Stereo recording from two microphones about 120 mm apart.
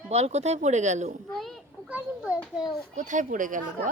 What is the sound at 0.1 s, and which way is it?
Speech, 65° right (ahead or behind).